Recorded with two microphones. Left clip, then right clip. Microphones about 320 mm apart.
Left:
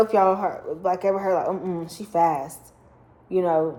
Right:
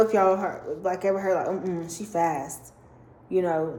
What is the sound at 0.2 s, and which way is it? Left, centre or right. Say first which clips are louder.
A woman's voice: left 2 dB; centre.